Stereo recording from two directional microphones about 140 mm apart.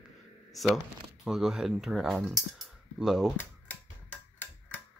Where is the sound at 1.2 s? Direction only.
5° right (ahead or behind).